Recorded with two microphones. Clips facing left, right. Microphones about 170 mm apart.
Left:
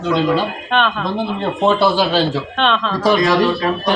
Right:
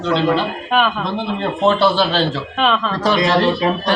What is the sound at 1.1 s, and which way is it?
Speech, 10° left (ahead or behind).